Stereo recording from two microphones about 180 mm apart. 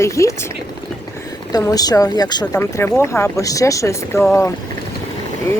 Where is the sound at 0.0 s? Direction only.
15° left (ahead or behind).